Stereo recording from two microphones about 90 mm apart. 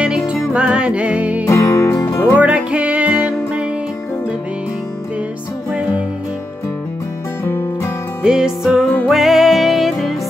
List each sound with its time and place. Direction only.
0.0 s music: 10° right (ahead or behind)
1.4 s music: 35° left (ahead or behind)
2.3 s music: 15° right (ahead or behind)
5.7 s music: 10° right (ahead or behind)
8.2 s music: 10° right (ahead or behind)